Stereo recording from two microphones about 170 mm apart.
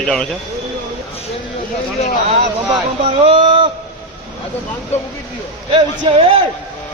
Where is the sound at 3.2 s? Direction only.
30° right (ahead or behind).